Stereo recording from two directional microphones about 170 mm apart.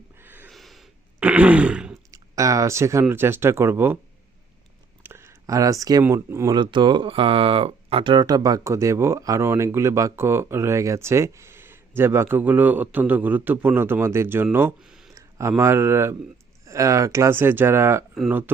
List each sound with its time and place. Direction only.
0.2 s a sound: 10° right (ahead or behind)
0.5 s throat clearing: centre (ahead or behind)
2.0 s speech: 20° right (ahead or behind)
5.0 s speech: 15° right (ahead or behind)
14.8 s a sound: centre (ahead or behind)
15.1 s speech: 15° right (ahead or behind)
18.1 s speech: centre (ahead or behind)